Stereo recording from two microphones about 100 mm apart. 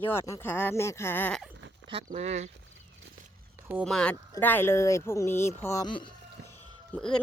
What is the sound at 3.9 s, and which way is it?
Speech, 5° left (ahead or behind).